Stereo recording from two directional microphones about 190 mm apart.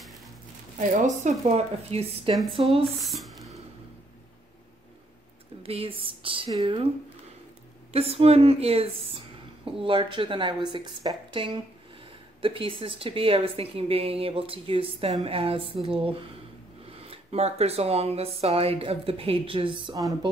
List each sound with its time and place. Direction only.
0.7 s speech: 40° right (ahead or behind)
2.8 s speech: centre (ahead or behind)
5.6 s a woman's voice: 30° right (ahead or behind)
7.9 s a woman's voice: 30° right (ahead or behind)